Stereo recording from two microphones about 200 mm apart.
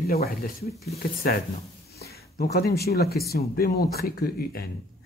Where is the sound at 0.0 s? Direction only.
50° left (ahead or behind).